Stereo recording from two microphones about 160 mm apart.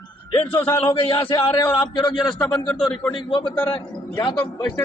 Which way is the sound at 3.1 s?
30° left (ahead or behind).